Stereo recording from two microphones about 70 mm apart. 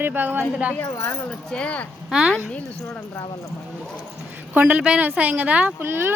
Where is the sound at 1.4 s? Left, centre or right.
Centre.